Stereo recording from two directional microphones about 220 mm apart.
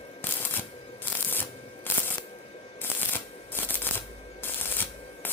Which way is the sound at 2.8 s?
10° left (ahead or behind).